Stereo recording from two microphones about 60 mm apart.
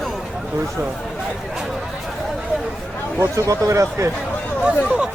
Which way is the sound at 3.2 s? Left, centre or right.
Right.